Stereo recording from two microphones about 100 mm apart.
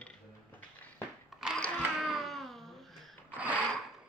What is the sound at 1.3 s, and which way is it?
Sewing machine, 5° right (ahead or behind).